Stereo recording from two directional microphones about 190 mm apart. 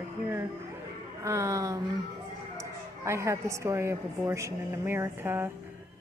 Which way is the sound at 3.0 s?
15° right (ahead or behind).